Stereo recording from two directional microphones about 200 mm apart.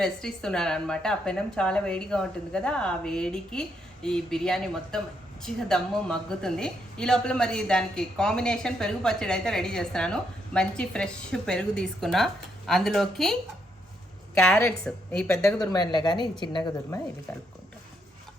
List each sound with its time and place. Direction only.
0.0 s a woman's voice: 5° left (ahead or behind); by 17.0 s 20° left (ahead or behind)